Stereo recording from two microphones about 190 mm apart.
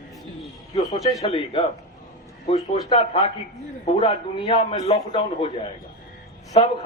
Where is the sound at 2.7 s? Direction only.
25° left (ahead or behind).